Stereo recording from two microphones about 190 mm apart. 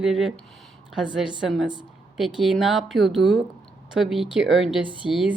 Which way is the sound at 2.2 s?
Centre (ahead or behind).